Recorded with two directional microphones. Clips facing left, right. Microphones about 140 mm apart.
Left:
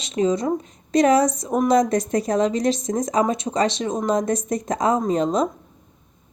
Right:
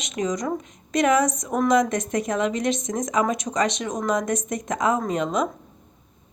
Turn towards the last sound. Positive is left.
turn(degrees=35)  # may be behind; listen again after turning